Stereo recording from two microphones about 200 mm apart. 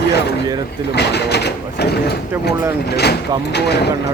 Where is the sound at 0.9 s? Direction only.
55° left (ahead or behind).